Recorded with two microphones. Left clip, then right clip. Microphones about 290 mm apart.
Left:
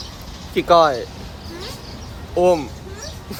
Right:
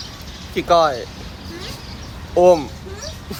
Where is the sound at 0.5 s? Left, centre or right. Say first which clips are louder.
Left 1 dB; centre.